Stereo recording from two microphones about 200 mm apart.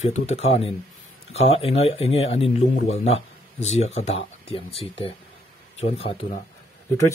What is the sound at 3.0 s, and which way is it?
Speech, 30° left (ahead or behind).